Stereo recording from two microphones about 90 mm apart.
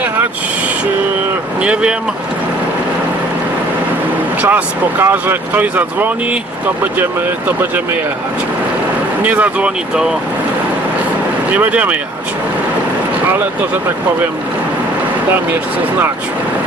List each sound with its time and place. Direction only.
1.6 s speech: 10° right (ahead or behind)
4.4 s speech: 20° right (ahead or behind)
9.2 s speech: 15° right (ahead or behind)
11.5 s speech: 15° right (ahead or behind)